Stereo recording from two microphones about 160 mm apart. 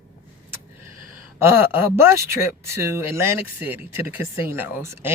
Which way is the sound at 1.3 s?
15° right (ahead or behind).